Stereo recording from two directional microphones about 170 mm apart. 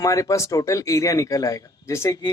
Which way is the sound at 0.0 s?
20° left (ahead or behind).